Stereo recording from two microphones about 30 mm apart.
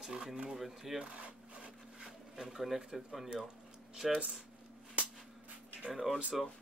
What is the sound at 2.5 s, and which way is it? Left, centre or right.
Speech, centre.